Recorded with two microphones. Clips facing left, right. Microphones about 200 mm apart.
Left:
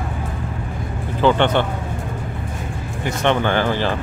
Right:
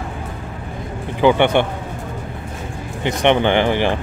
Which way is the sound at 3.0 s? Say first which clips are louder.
Right 3 dB; 20° right (ahead or behind).